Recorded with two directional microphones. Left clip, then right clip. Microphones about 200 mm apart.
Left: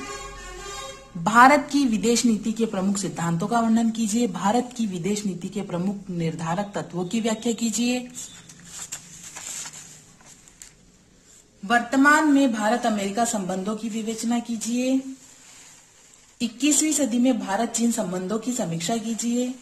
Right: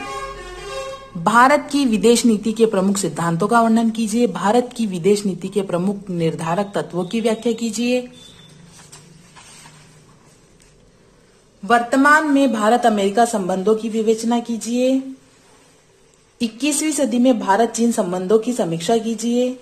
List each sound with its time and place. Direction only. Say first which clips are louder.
1.2 s a woman's voice: right 2 dB; centre (ahead or behind)
11.6 s a woman's voice: right 5 dB; centre (ahead or behind)
16.3 s a woman's voice: right 2 dB; centre (ahead or behind)